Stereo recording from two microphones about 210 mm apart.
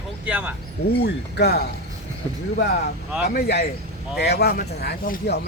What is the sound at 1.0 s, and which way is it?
Speech, 50° left (ahead or behind).